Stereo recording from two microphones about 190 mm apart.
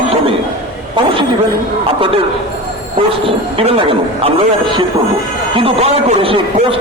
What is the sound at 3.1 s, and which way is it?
Speech, 30° right (ahead or behind).